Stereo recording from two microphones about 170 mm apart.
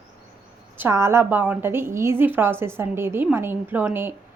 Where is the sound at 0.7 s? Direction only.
15° right (ahead or behind).